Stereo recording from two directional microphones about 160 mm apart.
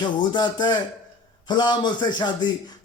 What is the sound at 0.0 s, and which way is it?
A man's voice, 25° left (ahead or behind).